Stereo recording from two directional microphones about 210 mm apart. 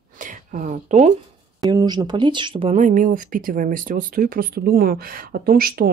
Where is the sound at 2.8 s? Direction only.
40° right (ahead or behind).